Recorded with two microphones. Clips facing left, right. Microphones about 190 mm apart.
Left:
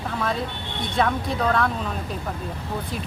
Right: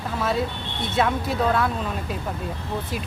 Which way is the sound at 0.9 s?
5° right (ahead or behind).